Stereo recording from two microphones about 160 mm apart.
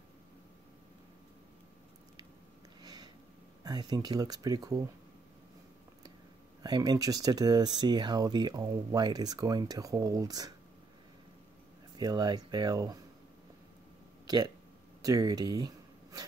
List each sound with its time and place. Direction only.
2.8 s a sound: 25° right (ahead or behind)
3.6 s speech: 25° right (ahead or behind)
6.6 s speech: 25° right (ahead or behind)
12.0 s speech: 25° right (ahead or behind)
14.2 s speech: 25° right (ahead or behind)